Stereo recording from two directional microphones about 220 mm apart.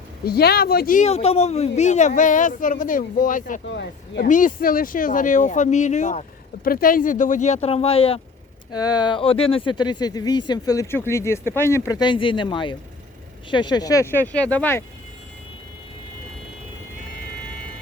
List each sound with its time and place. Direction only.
0.3 s speech: 45° left (ahead or behind)
3.7 s speech: 50° left (ahead or behind)
4.3 s speech: 35° left (ahead or behind); by 14.8 s 10° left (ahead or behind)